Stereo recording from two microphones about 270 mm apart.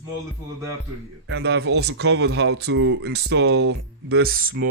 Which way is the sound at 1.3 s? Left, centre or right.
Right.